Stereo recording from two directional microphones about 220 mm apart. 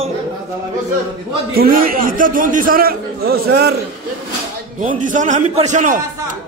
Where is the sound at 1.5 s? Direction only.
40° right (ahead or behind).